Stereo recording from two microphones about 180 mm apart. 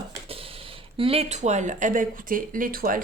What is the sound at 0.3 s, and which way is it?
Speech, 30° right (ahead or behind).